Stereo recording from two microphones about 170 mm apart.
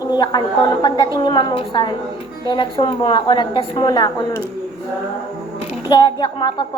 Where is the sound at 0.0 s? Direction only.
25° left (ahead or behind).